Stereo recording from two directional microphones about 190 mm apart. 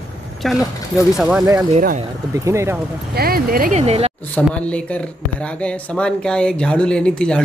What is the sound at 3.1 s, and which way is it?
Speech, 50° right (ahead or behind).